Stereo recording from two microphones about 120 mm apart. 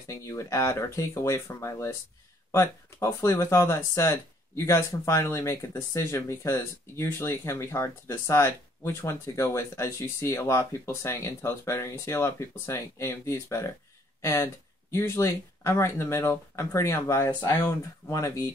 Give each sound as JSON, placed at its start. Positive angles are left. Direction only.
{"t": 0.1, "sound": "speech", "side_deg": 25}